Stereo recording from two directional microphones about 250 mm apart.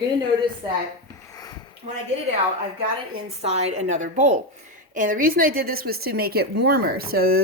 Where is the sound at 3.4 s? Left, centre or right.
Right.